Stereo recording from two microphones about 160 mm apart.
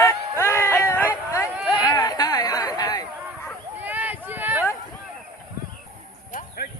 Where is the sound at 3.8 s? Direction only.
10° right (ahead or behind).